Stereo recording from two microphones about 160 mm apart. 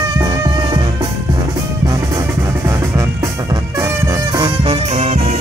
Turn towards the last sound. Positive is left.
turn(degrees=-45)  # may be behind; listen again after turning